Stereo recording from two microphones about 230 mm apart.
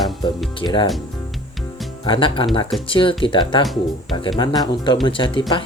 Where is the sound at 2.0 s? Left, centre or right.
Left.